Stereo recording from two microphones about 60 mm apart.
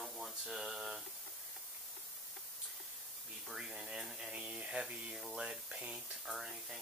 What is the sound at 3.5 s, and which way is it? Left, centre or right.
Speech, centre.